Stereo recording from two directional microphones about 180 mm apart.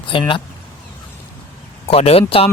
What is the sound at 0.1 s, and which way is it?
Speech, 30° left (ahead or behind).